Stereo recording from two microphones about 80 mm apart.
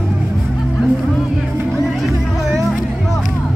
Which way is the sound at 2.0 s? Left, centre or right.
Centre.